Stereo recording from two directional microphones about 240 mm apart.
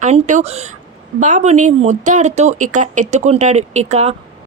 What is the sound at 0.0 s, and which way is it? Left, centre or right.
Speech, right.